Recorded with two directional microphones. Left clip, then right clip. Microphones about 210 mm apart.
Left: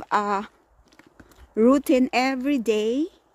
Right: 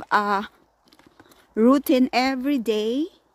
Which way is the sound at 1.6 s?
5° right (ahead or behind).